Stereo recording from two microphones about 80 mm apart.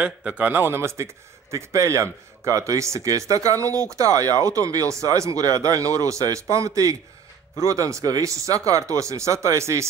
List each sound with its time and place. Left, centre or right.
0.0 s speech: centre; by 9.8 s right